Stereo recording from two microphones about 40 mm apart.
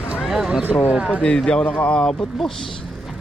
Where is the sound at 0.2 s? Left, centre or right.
Centre.